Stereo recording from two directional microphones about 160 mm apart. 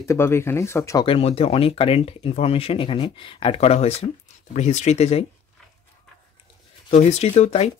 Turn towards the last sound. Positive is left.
turn(degrees=40)  # may be behind; listen again after turning